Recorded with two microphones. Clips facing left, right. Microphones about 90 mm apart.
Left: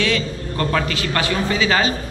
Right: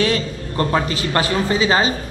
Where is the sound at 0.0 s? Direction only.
40° right (ahead or behind).